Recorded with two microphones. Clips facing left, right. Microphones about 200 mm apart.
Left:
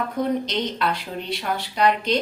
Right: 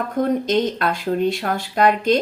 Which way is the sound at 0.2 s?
50° right (ahead or behind).